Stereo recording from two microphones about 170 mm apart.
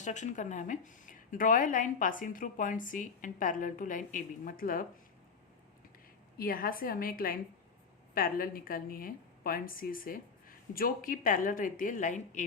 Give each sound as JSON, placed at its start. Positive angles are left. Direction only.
{"t": 0.0, "sound": "speech", "side_deg": 45}
{"t": 6.3, "sound": "a woman's voice", "side_deg": 60}